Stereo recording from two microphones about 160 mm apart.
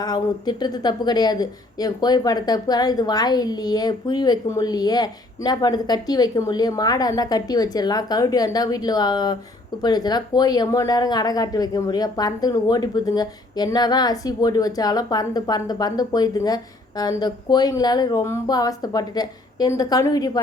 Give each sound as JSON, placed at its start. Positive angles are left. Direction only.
{"t": 0.0, "sound": "a woman's voice", "side_deg": 25}